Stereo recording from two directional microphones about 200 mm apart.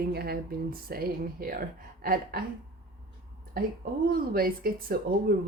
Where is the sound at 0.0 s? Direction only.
50° right (ahead or behind).